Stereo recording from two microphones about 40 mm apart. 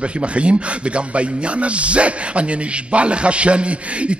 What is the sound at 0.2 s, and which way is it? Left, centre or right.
A man's voice, right.